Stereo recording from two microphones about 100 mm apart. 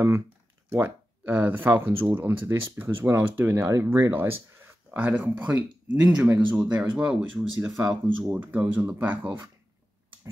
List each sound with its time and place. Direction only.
0.7 s speech: 20° right (ahead or behind)